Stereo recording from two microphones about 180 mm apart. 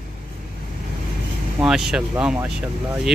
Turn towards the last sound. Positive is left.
turn(degrees=-5)  # may be behind; listen again after turning